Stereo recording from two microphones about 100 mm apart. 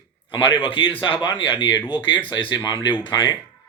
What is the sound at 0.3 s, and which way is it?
A man's voice, 55° left (ahead or behind).